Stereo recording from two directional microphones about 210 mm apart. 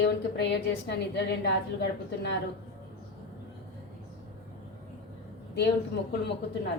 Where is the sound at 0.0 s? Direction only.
55° left (ahead or behind).